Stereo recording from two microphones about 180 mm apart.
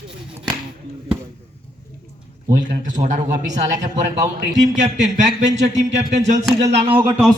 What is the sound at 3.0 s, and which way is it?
Speech, 40° right (ahead or behind).